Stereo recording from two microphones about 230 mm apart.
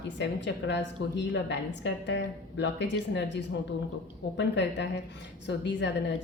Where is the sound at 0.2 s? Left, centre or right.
Left.